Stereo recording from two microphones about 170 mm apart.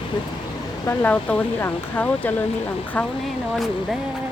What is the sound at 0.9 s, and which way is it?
Speech, 10° left (ahead or behind).